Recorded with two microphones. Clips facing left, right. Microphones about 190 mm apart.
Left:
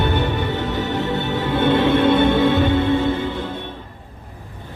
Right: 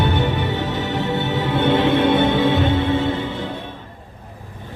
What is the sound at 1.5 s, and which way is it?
Music, 20° right (ahead or behind).